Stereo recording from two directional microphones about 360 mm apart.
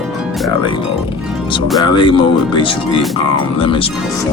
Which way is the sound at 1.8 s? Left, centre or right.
Centre.